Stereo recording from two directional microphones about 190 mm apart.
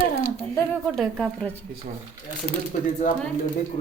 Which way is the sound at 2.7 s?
40° left (ahead or behind).